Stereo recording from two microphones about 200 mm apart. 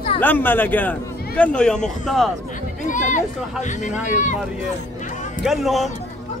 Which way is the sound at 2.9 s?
40° left (ahead or behind).